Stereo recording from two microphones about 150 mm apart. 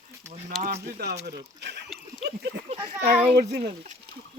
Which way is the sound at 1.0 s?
90° right.